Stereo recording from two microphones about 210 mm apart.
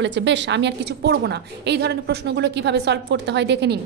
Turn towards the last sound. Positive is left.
turn(degrees=-55)  # may be behind; listen again after turning